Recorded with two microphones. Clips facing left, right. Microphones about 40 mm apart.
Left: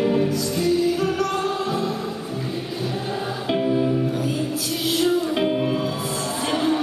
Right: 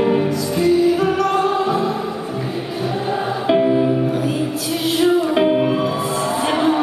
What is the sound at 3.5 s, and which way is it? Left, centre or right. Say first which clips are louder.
Music: right 6 dB; centre.